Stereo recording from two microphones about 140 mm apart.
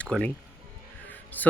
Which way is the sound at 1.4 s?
10° left (ahead or behind).